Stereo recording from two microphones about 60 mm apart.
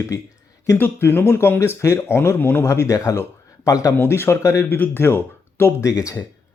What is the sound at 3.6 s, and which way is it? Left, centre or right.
Speech, left.